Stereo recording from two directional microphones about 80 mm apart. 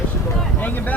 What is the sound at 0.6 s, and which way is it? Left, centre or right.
Vehicle, left.